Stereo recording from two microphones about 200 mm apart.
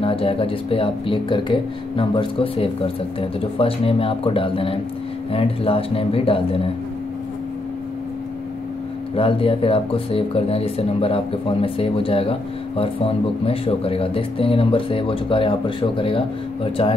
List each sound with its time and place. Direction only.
0.0 s speech: 30° left (ahead or behind)
9.1 s speech: 25° left (ahead or behind)